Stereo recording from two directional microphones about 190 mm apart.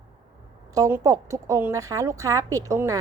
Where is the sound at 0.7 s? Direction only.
15° right (ahead or behind).